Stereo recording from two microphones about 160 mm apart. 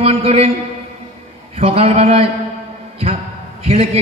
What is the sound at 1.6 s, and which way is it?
Speech, 35° right (ahead or behind).